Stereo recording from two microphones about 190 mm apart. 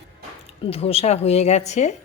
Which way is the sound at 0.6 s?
30° left (ahead or behind).